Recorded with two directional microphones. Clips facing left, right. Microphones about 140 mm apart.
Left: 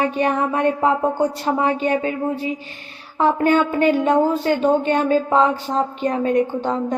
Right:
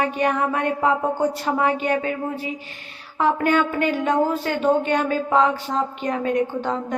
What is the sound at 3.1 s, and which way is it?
A woman's voice, 30° left (ahead or behind).